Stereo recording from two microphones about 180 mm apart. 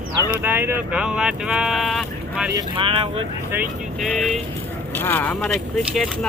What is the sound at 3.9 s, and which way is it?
Speech, centre (ahead or behind).